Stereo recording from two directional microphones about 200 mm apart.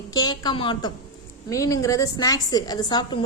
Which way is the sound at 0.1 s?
20° left (ahead or behind).